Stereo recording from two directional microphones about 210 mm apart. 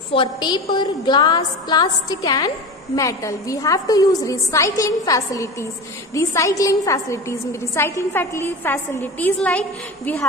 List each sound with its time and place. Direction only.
0.1 s a woman's voice: 20° left (ahead or behind); by 10.2 s 5° left (ahead or behind)